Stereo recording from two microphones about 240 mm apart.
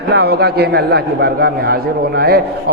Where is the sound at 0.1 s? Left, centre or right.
Right.